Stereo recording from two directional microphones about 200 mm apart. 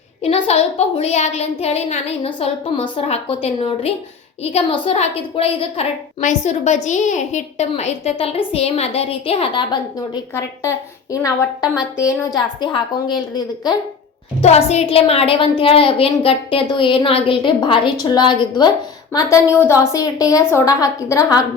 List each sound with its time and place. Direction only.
0.2 s a woman's voice: 30° left (ahead or behind)
14.4 s a woman's voice: 35° left (ahead or behind); by 21.3 s 15° left (ahead or behind)